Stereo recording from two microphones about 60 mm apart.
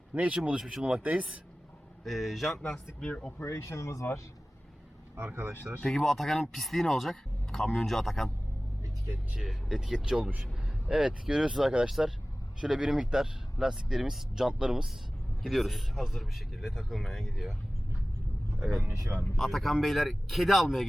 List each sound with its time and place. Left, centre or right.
0.1 s speech: right
0.6 s speech: centre
0.9 s a man's voice: right
2.0 s speech: centre
3.0 s speech: left
3.3 s speech: left
5.1 s speech: right
5.9 s speech: centre
9.5 s speech: centre
18.8 s a man's voice: right
19.4 s speech: centre